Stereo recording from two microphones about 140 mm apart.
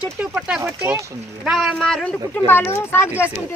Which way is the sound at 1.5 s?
Centre (ahead or behind).